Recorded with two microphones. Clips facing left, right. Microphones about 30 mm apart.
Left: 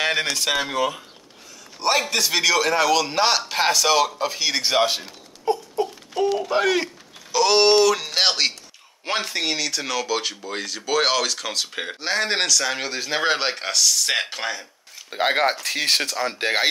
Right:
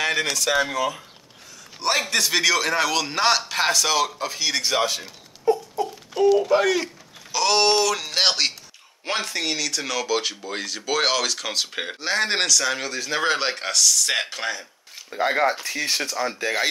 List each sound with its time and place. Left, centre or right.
0.0 s a sound: left
0.6 s speech: left
1.8 s a man's voice: centre; by 5.5 s left
6.1 s a man's voice: centre
6.6 s speech: left
7.3 s speech: centre
12.8 s a man's voice: centre
15.0 s speech: left
16.3 s speech: left